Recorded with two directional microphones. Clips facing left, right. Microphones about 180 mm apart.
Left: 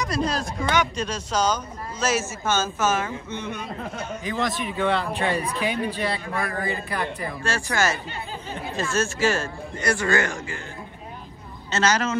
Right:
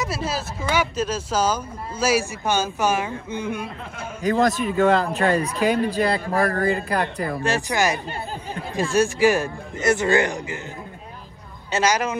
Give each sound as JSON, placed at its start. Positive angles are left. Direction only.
{"t": 0.0, "sound": "speech", "side_deg": -5}
{"t": 4.6, "sound": "speech", "side_deg": -40}
{"t": 7.4, "sound": "a man's voice", "side_deg": -20}
{"t": 11.7, "sound": "speech", "side_deg": -10}